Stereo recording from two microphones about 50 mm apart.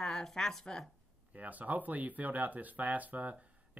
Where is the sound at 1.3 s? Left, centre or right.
Right.